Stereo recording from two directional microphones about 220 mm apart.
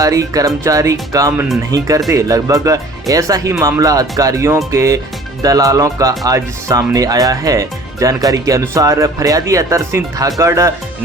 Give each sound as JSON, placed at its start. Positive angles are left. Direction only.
{"t": 0.0, "sound": "speech", "side_deg": -15}